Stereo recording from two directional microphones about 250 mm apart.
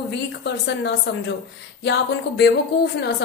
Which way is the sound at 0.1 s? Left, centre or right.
Left.